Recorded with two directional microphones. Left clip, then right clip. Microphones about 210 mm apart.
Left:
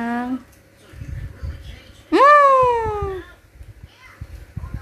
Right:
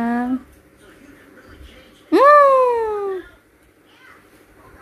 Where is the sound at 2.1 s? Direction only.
10° right (ahead or behind).